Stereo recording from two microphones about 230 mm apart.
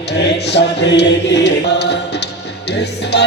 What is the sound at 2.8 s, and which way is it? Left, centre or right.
Music, left.